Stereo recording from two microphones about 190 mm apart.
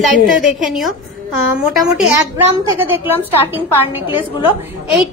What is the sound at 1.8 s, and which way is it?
A woman's voice, 15° right (ahead or behind).